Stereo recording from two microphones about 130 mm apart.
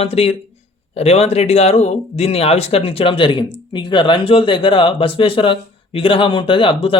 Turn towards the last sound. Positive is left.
turn(degrees=40)  # may be behind; listen again after turning